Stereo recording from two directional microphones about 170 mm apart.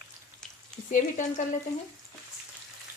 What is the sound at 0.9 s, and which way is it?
Speech, 45° left (ahead or behind).